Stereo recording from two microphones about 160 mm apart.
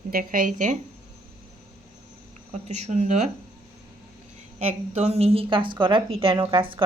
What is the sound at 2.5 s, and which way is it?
Speech, 45° right (ahead or behind).